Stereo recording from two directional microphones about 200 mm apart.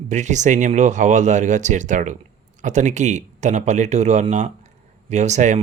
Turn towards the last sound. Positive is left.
turn(degrees=-35)  # may be behind; listen again after turning